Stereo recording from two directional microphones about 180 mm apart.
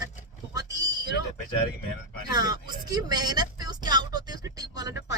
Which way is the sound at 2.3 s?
25° right (ahead or behind).